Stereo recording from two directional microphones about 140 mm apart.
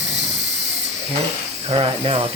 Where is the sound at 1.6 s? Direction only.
40° right (ahead or behind).